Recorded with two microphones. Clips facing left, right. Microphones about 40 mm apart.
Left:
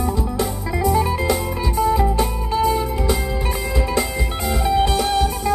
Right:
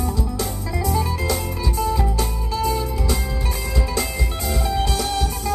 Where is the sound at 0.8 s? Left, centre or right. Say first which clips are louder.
Left 5 dB; centre.